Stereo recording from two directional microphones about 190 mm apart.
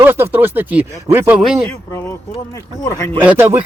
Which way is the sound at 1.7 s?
10° left (ahead or behind).